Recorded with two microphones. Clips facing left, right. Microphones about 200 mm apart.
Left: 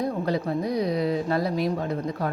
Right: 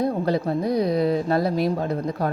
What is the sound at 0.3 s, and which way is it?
Speech, 30° right (ahead or behind).